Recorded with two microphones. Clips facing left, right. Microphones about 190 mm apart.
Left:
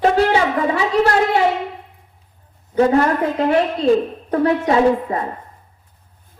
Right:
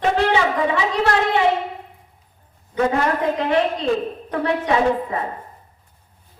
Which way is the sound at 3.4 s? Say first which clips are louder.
Left 3 dB; 40° left (ahead or behind).